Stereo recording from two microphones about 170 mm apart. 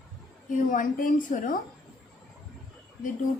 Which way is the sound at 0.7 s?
50° left (ahead or behind).